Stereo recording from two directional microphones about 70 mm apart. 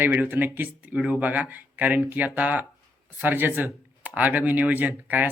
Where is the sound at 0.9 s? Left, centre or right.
Centre.